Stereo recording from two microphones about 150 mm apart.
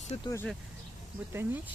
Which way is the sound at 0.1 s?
45° left (ahead or behind).